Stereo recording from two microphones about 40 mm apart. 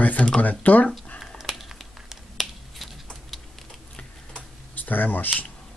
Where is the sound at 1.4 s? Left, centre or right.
Centre.